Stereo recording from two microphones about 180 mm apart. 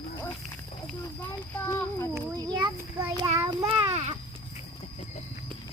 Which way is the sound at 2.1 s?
20° right (ahead or behind).